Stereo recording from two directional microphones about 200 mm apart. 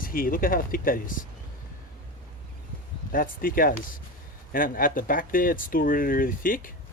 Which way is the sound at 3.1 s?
45° left (ahead or behind).